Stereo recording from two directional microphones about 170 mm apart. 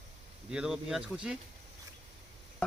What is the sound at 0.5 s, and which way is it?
Speech, 5° right (ahead or behind).